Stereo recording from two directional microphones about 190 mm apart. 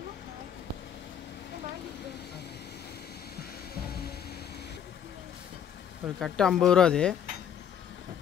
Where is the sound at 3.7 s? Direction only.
55° left (ahead or behind).